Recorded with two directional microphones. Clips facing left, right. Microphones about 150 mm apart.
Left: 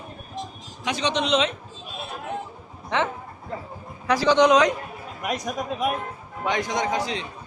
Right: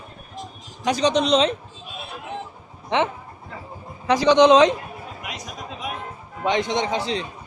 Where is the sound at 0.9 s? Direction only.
40° right (ahead or behind).